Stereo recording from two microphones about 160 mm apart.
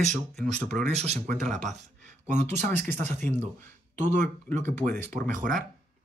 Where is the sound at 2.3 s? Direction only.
50° right (ahead or behind).